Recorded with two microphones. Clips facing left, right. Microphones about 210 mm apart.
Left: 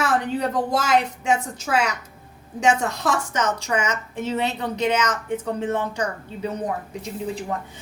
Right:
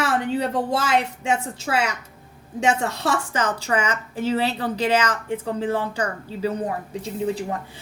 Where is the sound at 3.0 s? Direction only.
30° right (ahead or behind).